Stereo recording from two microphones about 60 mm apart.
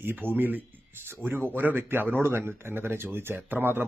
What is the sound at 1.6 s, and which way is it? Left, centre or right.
Speech, right.